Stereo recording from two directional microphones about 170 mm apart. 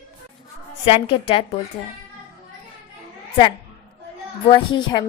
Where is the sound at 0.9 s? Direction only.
30° left (ahead or behind).